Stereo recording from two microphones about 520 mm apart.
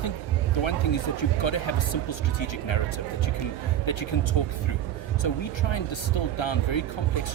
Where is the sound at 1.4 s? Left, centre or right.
Left.